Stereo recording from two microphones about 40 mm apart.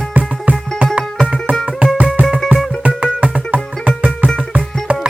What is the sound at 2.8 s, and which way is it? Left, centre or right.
Music, right.